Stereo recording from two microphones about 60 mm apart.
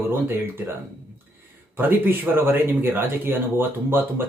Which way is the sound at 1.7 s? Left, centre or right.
Right.